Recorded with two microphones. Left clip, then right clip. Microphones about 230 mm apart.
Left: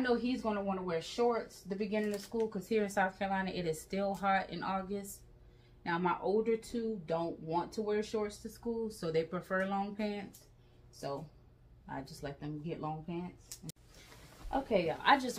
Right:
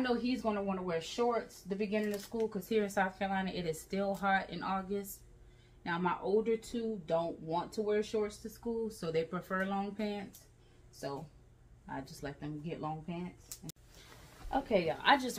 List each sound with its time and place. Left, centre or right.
0.0 s speech: centre
2.1 s a woman's voice: centre
2.5 s speech: centre
14.5 s a woman's voice: centre